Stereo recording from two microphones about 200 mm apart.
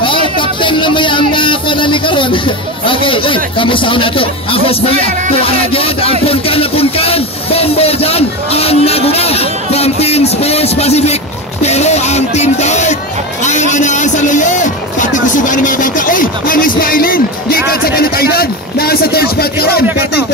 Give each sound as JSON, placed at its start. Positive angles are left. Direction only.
{"t": 0.0, "sound": "speech", "side_deg": 25}
{"t": 11.6, "sound": "music", "side_deg": 35}
{"t": 13.4, "sound": "speech", "side_deg": 35}